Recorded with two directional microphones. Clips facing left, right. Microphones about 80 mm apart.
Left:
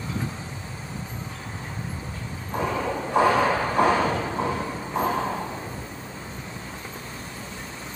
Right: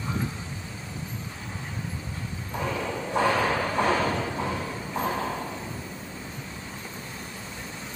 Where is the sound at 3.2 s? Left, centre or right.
Centre.